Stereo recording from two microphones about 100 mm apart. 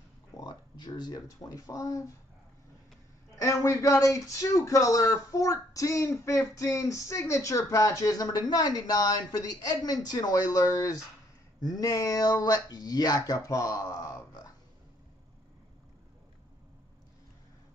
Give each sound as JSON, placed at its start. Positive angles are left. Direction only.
{"t": 0.4, "sound": "speech", "side_deg": 45}
{"t": 3.4, "sound": "speech", "side_deg": 30}